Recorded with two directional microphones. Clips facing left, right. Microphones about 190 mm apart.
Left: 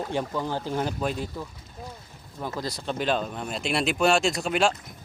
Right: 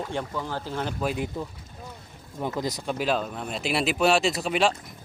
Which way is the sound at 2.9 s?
5° right (ahead or behind).